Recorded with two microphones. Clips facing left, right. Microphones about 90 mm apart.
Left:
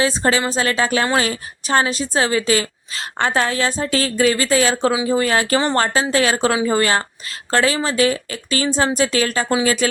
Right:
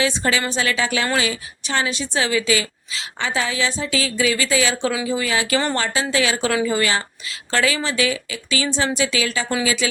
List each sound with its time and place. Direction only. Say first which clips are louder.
0.0 s a woman's voice: left 3 dB; 35° left (ahead or behind)